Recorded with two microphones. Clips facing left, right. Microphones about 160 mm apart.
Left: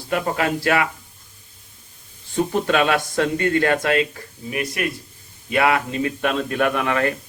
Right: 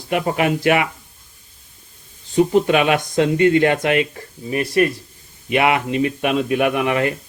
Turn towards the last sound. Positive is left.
turn(degrees=-20)  # may be behind; listen again after turning